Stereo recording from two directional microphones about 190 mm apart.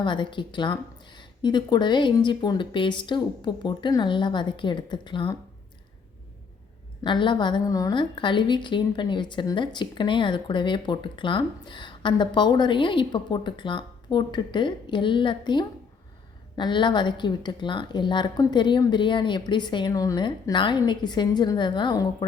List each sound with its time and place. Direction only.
0.0 s a woman's voice: 25° left (ahead or behind)
7.0 s a woman's voice: 25° left (ahead or behind)